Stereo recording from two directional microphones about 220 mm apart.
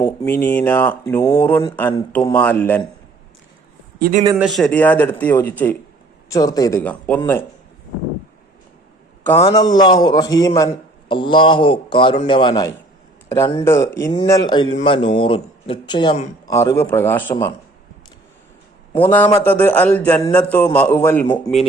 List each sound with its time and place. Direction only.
0.4 s speech: 10° left (ahead or behind)
4.4 s speech: centre (ahead or behind)
9.4 s a man's voice: 20° left (ahead or behind)
16.5 s speech: 15° left (ahead or behind)
18.9 s speech: 10° left (ahead or behind)